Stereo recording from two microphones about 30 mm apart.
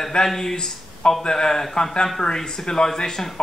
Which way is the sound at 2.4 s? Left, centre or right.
Centre.